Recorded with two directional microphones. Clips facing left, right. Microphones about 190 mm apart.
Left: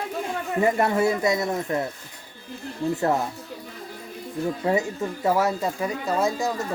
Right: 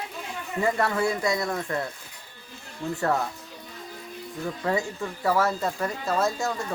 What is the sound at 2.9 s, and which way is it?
Speech, 20° left (ahead or behind).